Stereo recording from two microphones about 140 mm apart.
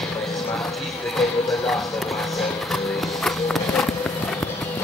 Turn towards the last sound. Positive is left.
turn(degrees=5)  # may be behind; listen again after turning